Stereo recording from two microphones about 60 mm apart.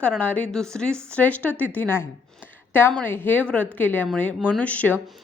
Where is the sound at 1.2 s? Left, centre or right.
Left.